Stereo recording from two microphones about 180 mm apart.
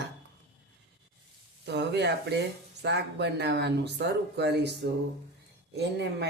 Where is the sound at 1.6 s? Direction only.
70° right (ahead or behind).